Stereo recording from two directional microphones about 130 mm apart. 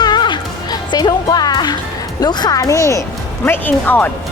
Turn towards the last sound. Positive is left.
turn(degrees=15)  # may be behind; listen again after turning